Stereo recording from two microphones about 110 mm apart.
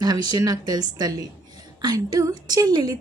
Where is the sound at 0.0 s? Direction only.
40° right (ahead or behind).